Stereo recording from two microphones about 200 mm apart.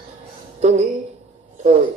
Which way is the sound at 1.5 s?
30° right (ahead or behind).